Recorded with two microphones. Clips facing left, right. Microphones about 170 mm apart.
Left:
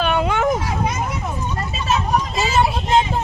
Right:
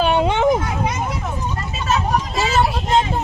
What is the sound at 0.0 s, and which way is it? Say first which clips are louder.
Vehicle: right 2 dB; 30° right (ahead or behind).